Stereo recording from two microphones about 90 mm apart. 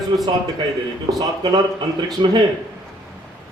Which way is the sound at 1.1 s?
55° right (ahead or behind).